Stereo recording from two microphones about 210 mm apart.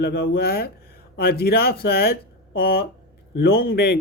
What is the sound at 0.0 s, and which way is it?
A man's voice, 50° left (ahead or behind).